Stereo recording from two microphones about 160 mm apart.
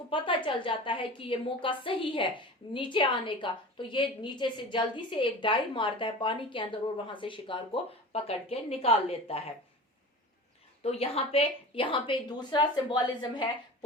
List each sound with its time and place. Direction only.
0.1 s a woman's voice: 30° left (ahead or behind)
10.8 s a woman's voice: 40° left (ahead or behind)